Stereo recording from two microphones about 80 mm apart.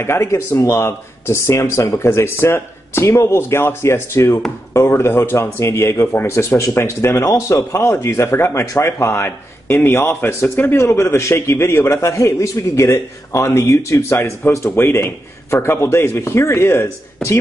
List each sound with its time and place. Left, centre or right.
0.0 s speech: left